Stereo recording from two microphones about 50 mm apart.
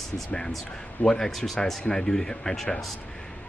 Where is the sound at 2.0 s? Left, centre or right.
Centre.